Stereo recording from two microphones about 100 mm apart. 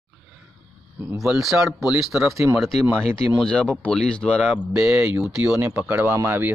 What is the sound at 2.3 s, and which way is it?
Speech, 25° right (ahead or behind).